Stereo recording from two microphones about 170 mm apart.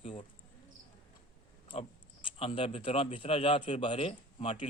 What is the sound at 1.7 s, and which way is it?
Speech, 30° left (ahead or behind).